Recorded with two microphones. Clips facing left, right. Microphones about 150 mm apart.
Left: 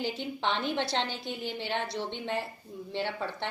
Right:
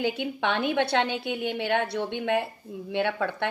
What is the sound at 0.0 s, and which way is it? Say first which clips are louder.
A woman's voice: right 5 dB; 60° right (ahead or behind).